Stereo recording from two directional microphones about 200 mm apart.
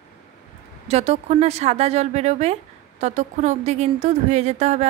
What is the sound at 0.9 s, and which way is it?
A woman's voice, 30° right (ahead or behind).